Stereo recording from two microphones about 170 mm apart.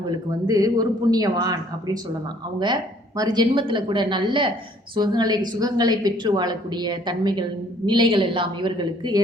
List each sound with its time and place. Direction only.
0.3 s a woman's voice: 20° right (ahead or behind)
3.2 s a woman's voice: 25° right (ahead or behind)